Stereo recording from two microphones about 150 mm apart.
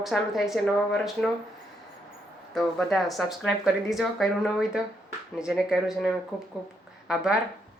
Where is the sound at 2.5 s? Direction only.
5° left (ahead or behind).